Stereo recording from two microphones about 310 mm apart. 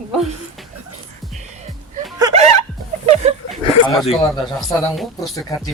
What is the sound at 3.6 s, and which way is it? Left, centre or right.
Speech, centre.